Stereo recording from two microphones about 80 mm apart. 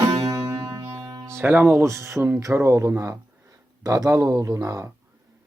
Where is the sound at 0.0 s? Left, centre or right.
Right.